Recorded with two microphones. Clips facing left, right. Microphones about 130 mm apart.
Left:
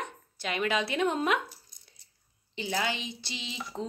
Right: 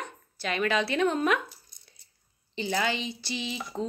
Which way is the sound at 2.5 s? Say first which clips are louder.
Right 3 dB; 10° left (ahead or behind).